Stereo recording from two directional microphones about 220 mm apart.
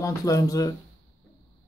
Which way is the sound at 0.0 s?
15° left (ahead or behind).